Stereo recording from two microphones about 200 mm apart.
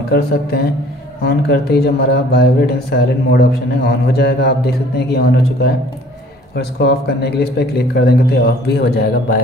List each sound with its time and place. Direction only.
0.1 s speech: 55° left (ahead or behind)